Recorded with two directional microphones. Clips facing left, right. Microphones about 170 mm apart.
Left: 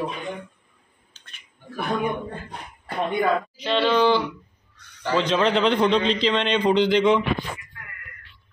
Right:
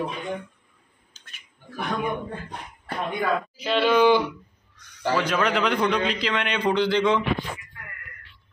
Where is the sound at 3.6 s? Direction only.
5° right (ahead or behind).